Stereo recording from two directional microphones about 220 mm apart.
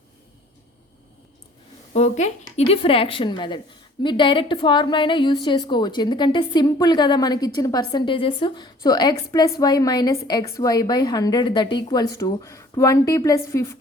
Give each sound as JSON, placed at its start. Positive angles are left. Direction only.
{"t": 1.9, "sound": "a woman's voice", "side_deg": 30}